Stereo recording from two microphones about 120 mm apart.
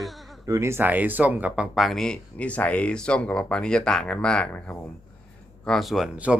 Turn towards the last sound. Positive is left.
turn(degrees=-10)  # may be behind; listen again after turning